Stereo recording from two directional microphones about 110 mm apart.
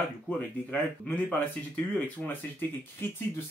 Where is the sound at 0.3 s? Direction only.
15° left (ahead or behind).